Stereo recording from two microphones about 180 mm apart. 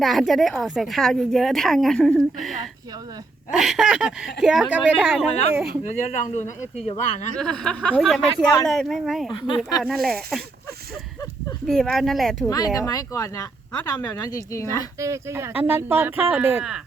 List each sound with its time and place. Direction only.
0.0 s a woman's voice: centre (ahead or behind)
5.8 s speech: 40° left (ahead or behind)
7.3 s a woman's voice: 5° left (ahead or behind)
11.6 s a woman's voice: centre (ahead or behind)
12.5 s speech: 20° left (ahead or behind)
14.9 s speech: 15° right (ahead or behind)